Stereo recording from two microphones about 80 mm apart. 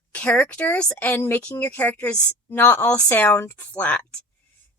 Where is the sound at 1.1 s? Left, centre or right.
Left.